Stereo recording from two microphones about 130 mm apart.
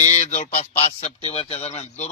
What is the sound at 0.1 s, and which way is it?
A man's voice, 60° left (ahead or behind).